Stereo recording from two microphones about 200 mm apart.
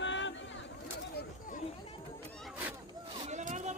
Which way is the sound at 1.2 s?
40° left (ahead or behind).